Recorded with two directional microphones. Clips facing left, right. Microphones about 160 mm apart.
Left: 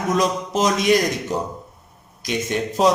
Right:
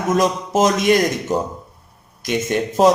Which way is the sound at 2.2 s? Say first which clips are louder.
Right 3 dB; 50° right (ahead or behind).